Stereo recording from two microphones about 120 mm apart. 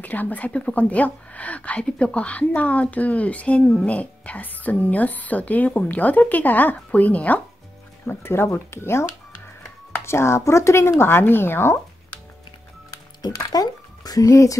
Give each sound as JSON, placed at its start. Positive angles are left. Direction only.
{"t": 0.0, "sound": "a woman's voice", "side_deg": 15}
{"t": 10.0, "sound": "speech", "side_deg": 20}
{"t": 13.5, "sound": "speech", "side_deg": 30}